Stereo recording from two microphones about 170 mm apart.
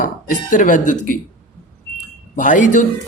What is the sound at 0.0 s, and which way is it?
A man's voice, 50° left (ahead or behind).